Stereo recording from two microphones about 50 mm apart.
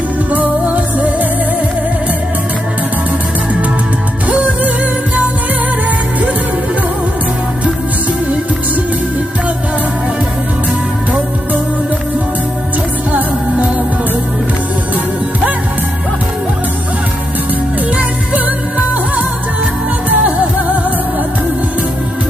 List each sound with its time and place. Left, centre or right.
0.3 s music: right
4.3 s music: right
13.1 s music: right
17.9 s music: right
20.1 s music: right